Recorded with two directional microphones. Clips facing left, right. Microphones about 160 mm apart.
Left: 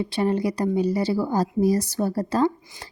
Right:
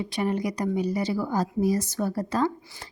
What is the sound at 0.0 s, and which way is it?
A woman's voice, 30° left (ahead or behind).